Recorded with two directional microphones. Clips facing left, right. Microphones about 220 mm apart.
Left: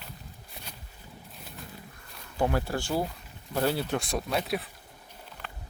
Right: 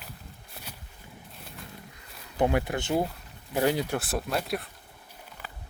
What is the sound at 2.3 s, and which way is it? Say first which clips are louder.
Speech: right 2 dB; 20° right (ahead or behind).